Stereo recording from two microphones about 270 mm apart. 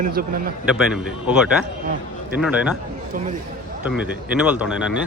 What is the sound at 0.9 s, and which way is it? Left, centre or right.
Speech, centre.